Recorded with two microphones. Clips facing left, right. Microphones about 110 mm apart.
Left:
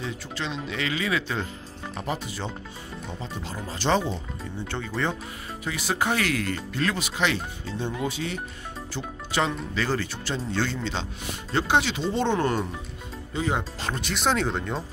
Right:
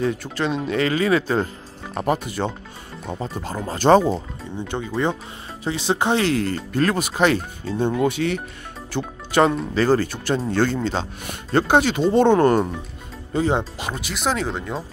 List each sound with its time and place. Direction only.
0.0 s speech: 55° right (ahead or behind)
2.0 s speech: 55° right (ahead or behind)
4.6 s speech: 15° right (ahead or behind)
5.6 s speech: 30° right (ahead or behind)
6.7 s speech: 45° right (ahead or behind)
7.9 s speech: 65° right (ahead or behind)
8.9 s speech: 50° right (ahead or behind)
13.3 s speech: 35° right (ahead or behind)
13.7 s speech: 10° right (ahead or behind)